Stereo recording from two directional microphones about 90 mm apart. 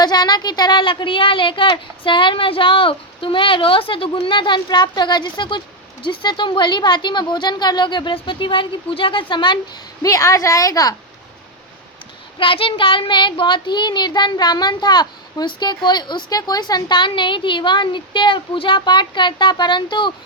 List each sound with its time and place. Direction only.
0.0 s speech: 50° left (ahead or behind)
10.0 s a woman's voice: 40° left (ahead or behind)
12.4 s speech: 75° left (ahead or behind); by 20.1 s 60° left (ahead or behind)